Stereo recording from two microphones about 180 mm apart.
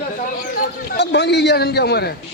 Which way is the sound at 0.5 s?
70° left (ahead or behind).